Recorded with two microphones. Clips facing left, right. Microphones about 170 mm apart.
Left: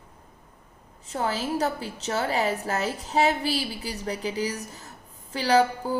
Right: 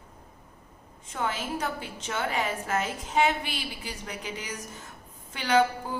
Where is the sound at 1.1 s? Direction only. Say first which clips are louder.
Left 4 dB; 35° left (ahead or behind).